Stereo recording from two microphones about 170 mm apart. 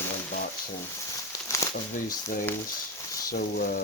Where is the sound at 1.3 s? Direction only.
15° left (ahead or behind).